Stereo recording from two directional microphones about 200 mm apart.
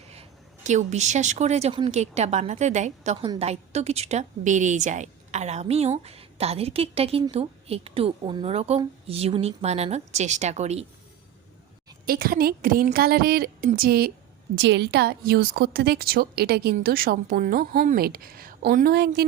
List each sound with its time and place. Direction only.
0.1 s a woman's voice: 35° right (ahead or behind)
12.0 s a woman's voice: 50° right (ahead or behind)